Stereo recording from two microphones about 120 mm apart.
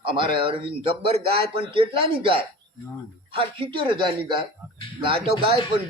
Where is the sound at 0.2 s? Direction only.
45° right (ahead or behind).